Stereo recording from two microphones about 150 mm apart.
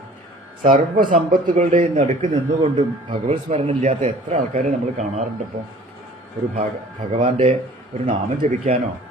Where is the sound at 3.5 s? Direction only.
45° right (ahead or behind).